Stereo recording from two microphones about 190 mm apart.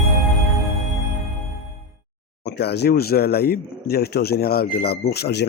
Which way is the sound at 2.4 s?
65° left (ahead or behind).